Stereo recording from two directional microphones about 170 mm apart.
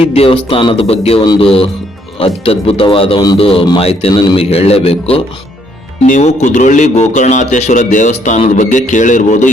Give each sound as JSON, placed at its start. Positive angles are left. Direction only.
{"t": 0.0, "sound": "a man's voice", "side_deg": 35}